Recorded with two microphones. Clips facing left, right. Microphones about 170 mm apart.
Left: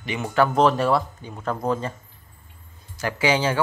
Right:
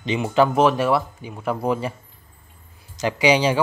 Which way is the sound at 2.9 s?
15° right (ahead or behind).